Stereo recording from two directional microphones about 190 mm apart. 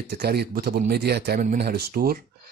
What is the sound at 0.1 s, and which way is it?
A man's voice, 55° right (ahead or behind).